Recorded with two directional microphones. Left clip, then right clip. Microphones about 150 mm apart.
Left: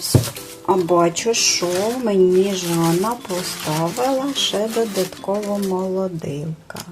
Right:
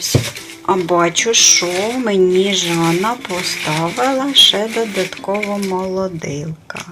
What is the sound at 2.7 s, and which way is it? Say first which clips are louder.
Speech: right 3 dB; 20° right (ahead or behind).